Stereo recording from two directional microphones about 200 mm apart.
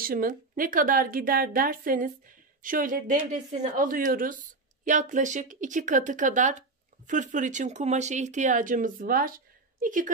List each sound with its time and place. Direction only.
0.0 s a woman's voice: 45° right (ahead or behind)